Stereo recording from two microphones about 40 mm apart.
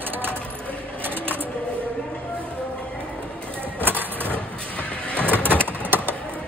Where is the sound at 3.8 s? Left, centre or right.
Right.